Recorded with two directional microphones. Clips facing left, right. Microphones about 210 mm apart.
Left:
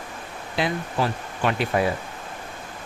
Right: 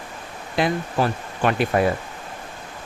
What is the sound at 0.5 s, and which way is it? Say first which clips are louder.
Speech: right 3 dB; 50° right (ahead or behind).